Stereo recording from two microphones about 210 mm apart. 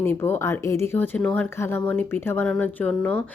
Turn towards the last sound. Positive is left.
turn(degrees=5)  # may be behind; listen again after turning